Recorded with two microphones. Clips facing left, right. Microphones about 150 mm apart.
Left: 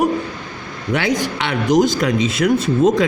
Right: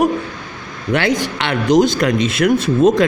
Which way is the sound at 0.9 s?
65° right (ahead or behind).